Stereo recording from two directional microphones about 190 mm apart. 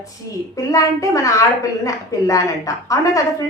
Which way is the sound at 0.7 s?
15° left (ahead or behind).